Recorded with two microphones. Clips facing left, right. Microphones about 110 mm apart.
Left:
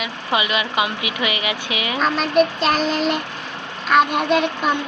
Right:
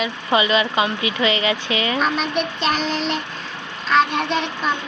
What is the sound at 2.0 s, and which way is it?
Child singing, centre (ahead or behind).